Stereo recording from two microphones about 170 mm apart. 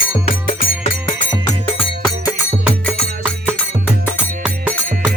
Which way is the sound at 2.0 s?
Centre (ahead or behind).